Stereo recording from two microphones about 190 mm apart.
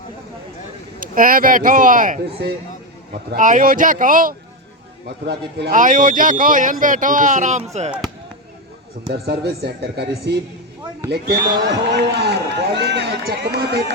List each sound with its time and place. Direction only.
0.9 s speech: 45° right (ahead or behind)
2.4 s speech: 60° right (ahead or behind)
3.1 s speech: 45° right (ahead or behind)
5.0 s speech: 65° right (ahead or behind)
5.7 s speech: 45° right (ahead or behind)
9.1 s speech: 55° right (ahead or behind)